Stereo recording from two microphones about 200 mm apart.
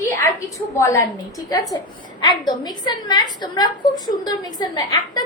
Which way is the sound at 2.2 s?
20° left (ahead or behind).